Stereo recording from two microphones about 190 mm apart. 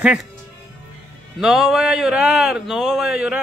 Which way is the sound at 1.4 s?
5° right (ahead or behind).